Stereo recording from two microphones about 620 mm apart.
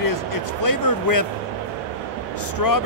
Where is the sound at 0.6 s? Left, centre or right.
Left.